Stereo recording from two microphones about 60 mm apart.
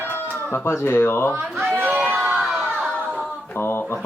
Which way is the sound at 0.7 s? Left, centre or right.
Left.